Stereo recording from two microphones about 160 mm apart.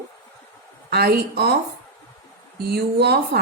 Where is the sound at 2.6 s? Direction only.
90° right.